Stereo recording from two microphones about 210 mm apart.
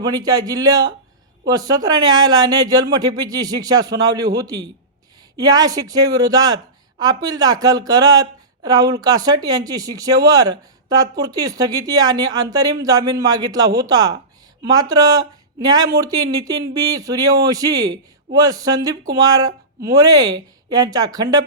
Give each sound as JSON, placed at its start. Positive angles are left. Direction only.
{"t": 0.0, "sound": "speech", "side_deg": -20}